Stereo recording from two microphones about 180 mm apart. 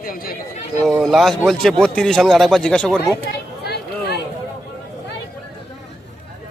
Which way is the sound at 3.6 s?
65° left (ahead or behind).